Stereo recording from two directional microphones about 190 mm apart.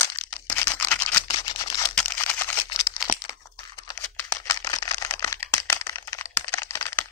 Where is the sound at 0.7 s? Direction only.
10° left (ahead or behind).